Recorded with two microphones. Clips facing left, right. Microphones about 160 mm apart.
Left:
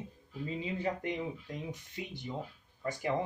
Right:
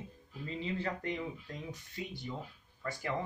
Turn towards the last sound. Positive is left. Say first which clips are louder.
# left 4 dB
turn(degrees=20)  # may be behind; listen again after turning